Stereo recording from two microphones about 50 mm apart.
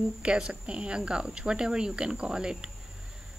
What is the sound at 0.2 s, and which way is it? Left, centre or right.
A woman's voice, centre.